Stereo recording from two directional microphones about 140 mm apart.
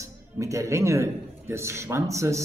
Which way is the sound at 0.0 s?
20° right (ahead or behind).